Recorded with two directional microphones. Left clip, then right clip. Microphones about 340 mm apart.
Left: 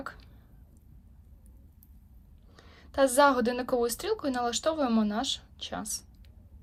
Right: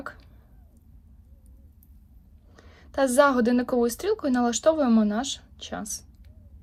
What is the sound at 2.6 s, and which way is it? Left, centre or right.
Speech, centre.